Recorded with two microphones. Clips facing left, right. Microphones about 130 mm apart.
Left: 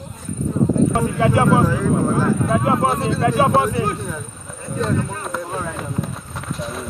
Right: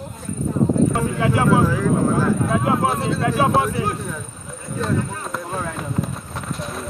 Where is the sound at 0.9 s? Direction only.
25° left (ahead or behind).